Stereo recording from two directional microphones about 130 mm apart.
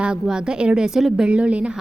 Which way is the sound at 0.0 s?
5° right (ahead or behind).